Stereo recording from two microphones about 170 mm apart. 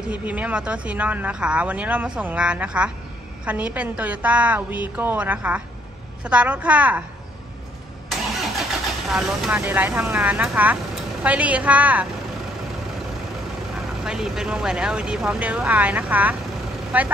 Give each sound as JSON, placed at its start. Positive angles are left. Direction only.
{"t": 0.1, "sound": "speech", "side_deg": -10}
{"t": 9.1, "sound": "speech", "side_deg": 0}
{"t": 14.0, "sound": "speech", "side_deg": -5}